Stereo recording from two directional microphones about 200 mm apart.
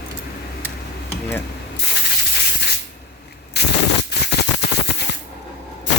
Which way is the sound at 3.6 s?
55° left (ahead or behind).